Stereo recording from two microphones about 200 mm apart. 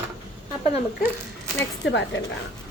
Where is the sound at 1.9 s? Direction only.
65° left (ahead or behind).